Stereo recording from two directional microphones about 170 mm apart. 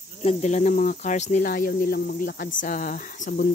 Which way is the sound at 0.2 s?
40° left (ahead or behind).